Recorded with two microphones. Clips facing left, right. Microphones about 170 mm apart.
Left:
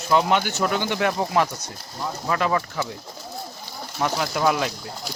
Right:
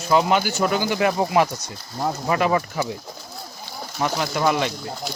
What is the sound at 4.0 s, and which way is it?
Speech, centre (ahead or behind).